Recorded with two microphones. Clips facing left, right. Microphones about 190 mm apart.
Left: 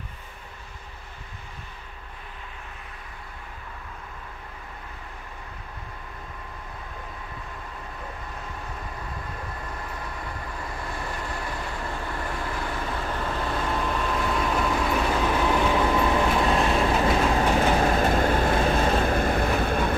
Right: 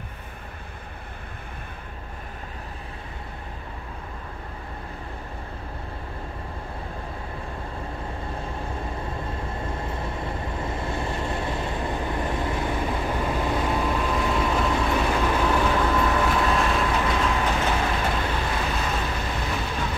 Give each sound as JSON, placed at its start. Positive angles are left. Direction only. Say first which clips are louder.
{"t": 9.1, "sound": "vehicle", "louder": "right 5 dB", "side_deg": -25}
{"t": 13.7, "sound": "vehicle", "louder": "right 2 dB", "side_deg": -5}
{"t": 17.0, "sound": "vehicle", "louder": "left 2 dB", "side_deg": 35}